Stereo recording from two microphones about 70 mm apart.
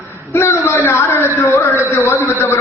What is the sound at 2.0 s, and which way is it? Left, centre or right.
Speech, left.